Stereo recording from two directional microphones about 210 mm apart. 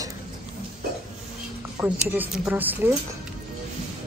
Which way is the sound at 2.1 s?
10° right (ahead or behind).